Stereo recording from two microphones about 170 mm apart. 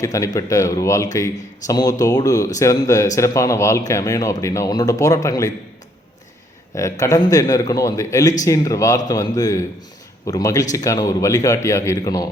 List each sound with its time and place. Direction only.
0.0 s speech: 20° left (ahead or behind)
6.7 s speech: 15° left (ahead or behind)